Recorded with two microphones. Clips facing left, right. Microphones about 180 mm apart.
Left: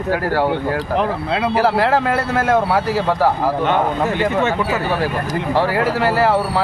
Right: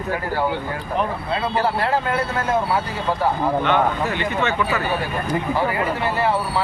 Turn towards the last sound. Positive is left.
turn(degrees=90)